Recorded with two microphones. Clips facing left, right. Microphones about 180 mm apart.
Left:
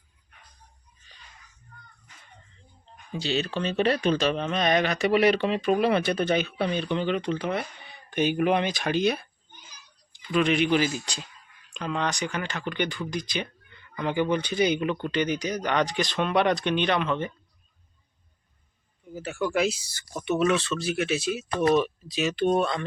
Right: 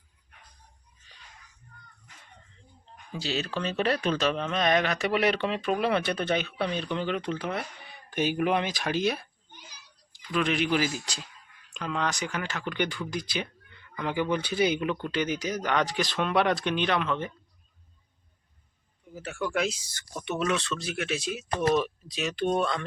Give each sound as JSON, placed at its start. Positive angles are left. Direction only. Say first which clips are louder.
{"t": 3.2, "sound": "speech", "louder": "left 3 dB", "side_deg": -5}
{"t": 9.5, "sound": "children playing", "louder": "right 4 dB", "side_deg": -75}
{"t": 10.2, "sound": "speech", "louder": "left 4 dB", "side_deg": 0}
{"t": 19.1, "sound": "speech", "louder": "left 3 dB", "side_deg": 5}